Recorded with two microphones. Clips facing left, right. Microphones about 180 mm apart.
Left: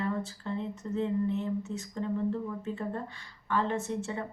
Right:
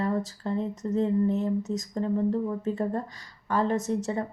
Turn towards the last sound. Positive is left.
turn(degrees=-40)  # may be behind; listen again after turning